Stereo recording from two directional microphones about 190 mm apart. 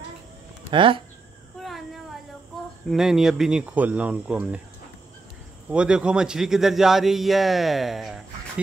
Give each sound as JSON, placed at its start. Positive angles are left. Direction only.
{"t": 0.7, "sound": "speech", "side_deg": -25}
{"t": 1.6, "sound": "a sound", "side_deg": 0}
{"t": 2.9, "sound": "a man's voice", "side_deg": 0}
{"t": 5.7, "sound": "a man's voice", "side_deg": -5}